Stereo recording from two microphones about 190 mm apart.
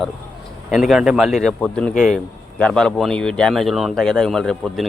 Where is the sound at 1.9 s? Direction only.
40° left (ahead or behind).